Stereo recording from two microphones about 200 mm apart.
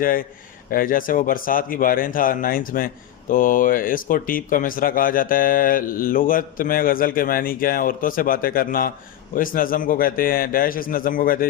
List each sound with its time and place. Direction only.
0.0 s speech: 45° left (ahead or behind)